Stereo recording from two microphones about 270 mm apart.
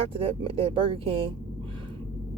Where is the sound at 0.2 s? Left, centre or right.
Centre.